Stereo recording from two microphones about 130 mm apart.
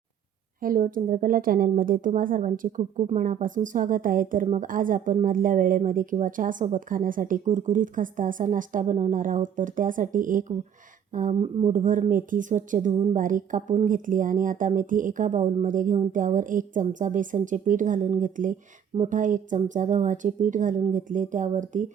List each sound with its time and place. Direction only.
0.6 s speech: 90° right
11.1 s a woman's voice: 80° right
13.1 s speech: 90° right; by 15.5 s 70° right (ahead or behind)
15.6 s a woman's voice: 85° right